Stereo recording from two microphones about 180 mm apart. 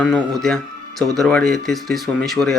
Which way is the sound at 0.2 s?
20° right (ahead or behind).